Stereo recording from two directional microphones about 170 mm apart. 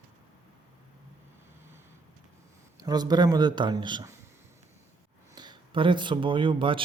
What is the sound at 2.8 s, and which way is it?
Speech, 25° right (ahead or behind).